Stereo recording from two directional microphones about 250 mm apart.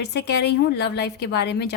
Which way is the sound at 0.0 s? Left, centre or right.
Left.